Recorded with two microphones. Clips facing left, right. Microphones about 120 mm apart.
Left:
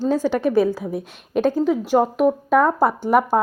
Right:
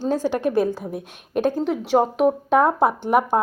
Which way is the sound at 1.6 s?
65° right (ahead or behind).